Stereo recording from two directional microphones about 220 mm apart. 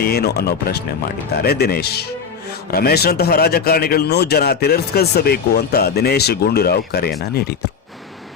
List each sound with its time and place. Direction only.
0.0 s speech: 45° left (ahead or behind)